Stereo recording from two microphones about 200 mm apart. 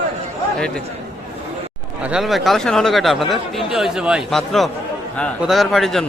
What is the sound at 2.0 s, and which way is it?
Speech, centre (ahead or behind).